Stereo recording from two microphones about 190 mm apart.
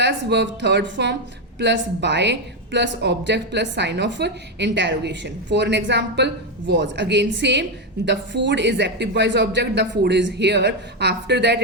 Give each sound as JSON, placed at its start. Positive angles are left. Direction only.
{"t": 0.0, "sound": "a woman's voice", "side_deg": -65}